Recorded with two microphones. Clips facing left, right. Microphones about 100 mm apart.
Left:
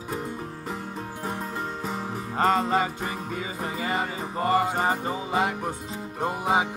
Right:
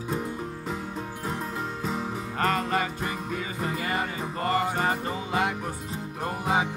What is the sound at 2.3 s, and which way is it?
Music, 25° left (ahead or behind).